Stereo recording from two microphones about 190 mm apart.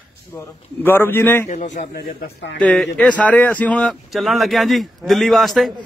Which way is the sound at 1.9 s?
60° left (ahead or behind).